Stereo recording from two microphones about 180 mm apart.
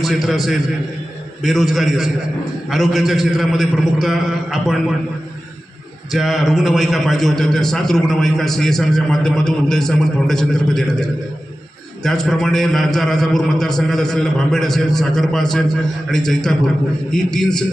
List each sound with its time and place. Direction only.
0.0 s a man's voice: centre (ahead or behind)
6.1 s a man's voice: centre (ahead or behind)